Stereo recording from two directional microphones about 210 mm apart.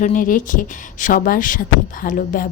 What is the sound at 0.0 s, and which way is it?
Speech, 40° left (ahead or behind).